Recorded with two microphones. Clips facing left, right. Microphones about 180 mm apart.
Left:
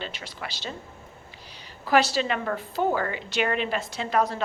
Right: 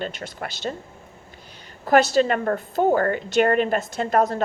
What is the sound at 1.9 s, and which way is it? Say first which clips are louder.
A woman's voice: right 5 dB; 45° right (ahead or behind).